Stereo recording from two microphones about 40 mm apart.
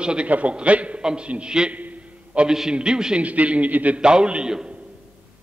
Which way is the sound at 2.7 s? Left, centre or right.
Right.